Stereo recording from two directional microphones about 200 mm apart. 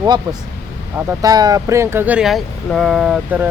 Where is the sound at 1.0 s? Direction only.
15° right (ahead or behind).